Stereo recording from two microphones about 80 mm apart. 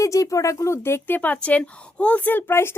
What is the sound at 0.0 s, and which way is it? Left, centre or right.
Speech, left.